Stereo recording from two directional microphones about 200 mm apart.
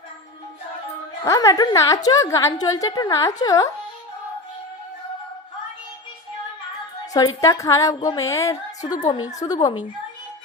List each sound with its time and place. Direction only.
1.2 s a woman's voice: 15° left (ahead or behind)
7.0 s a woman's voice: 20° left (ahead or behind)